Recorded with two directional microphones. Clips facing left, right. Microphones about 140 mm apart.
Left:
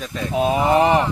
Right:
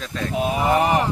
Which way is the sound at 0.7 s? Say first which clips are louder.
Left 2 dB; 30° left (ahead or behind).